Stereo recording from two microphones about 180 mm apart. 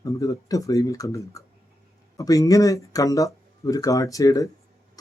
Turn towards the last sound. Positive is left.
turn(degrees=20)  # may be behind; listen again after turning